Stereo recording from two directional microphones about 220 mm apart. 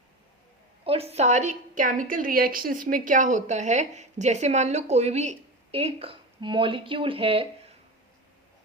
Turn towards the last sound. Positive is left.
turn(degrees=-25)  # may be behind; listen again after turning